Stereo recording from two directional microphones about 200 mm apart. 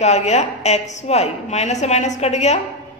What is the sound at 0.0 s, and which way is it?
A woman's voice, 35° left (ahead or behind).